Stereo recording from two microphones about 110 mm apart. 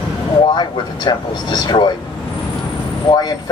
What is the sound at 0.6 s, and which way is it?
Speech, 40° left (ahead or behind).